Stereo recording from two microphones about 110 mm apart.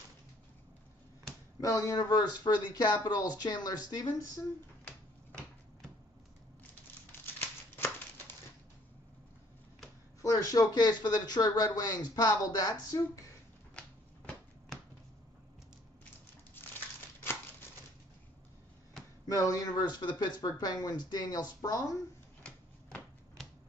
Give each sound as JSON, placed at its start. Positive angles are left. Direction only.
{"t": 1.6, "sound": "speech", "side_deg": 30}
{"t": 7.1, "sound": "crumpling", "side_deg": 20}
{"t": 10.2, "sound": "speech", "side_deg": 30}
{"t": 13.7, "sound": "a sound", "side_deg": 10}
{"t": 19.2, "sound": "speech", "side_deg": 30}
{"t": 22.4, "sound": "typewriter", "side_deg": 10}